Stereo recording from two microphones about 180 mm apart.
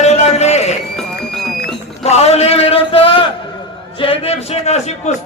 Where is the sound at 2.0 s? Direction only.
35° left (ahead or behind).